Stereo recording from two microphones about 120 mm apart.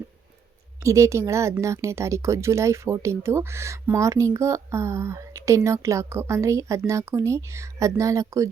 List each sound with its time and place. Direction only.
0.8 s speech: 25° right (ahead or behind)